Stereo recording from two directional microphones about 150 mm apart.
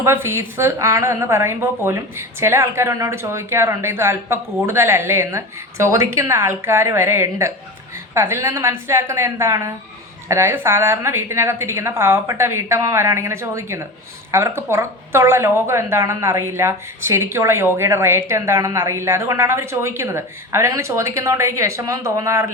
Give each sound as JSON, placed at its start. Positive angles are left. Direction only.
{"t": 0.0, "sound": "a woman's voice", "side_deg": -15}